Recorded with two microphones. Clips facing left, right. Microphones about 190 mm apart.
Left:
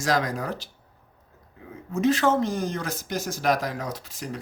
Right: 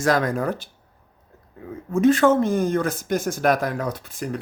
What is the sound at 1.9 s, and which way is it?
Speech, 50° right (ahead or behind).